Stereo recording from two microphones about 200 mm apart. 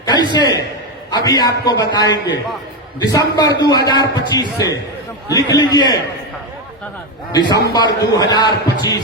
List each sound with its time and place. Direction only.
0.0 s a man's voice: 20° left (ahead or behind)
7.3 s a man's voice: 20° left (ahead or behind)